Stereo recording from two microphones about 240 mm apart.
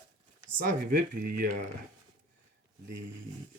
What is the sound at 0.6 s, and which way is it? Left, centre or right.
Speech, right.